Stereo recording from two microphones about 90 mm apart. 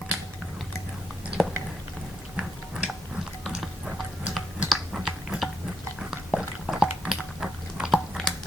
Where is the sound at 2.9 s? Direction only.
Centre (ahead or behind).